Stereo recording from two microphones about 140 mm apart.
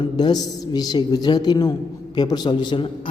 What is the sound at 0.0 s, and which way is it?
A man's voice, 30° left (ahead or behind).